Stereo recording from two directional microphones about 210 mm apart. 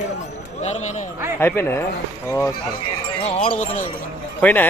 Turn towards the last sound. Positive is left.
turn(degrees=10)  # may be behind; listen again after turning